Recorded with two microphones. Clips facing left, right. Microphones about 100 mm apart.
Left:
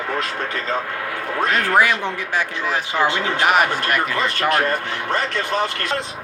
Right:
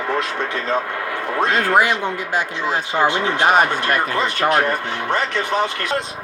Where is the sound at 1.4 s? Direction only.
25° right (ahead or behind).